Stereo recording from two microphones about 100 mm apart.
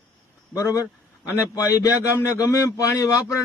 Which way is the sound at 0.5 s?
30° left (ahead or behind).